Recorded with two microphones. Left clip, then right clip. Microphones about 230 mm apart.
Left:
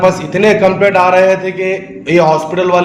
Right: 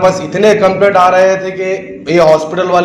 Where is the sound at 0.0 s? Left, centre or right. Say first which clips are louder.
Right 1 dB; left.